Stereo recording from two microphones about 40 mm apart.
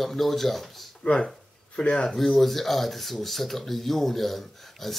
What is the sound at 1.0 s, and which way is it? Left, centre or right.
Speech, centre.